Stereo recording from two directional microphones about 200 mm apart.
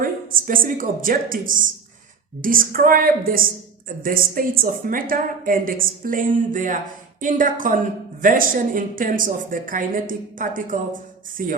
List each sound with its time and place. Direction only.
0.0 s a woman's voice: 45° right (ahead or behind)